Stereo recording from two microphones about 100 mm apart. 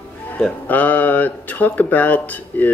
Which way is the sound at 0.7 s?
15° left (ahead or behind).